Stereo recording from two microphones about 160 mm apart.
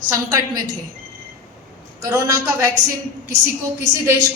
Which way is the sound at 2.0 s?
20° right (ahead or behind).